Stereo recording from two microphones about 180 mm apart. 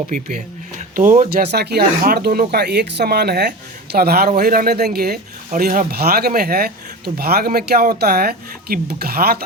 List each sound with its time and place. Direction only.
0.1 s speech: 45° right (ahead or behind)
1.5 s speech: 65° right (ahead or behind)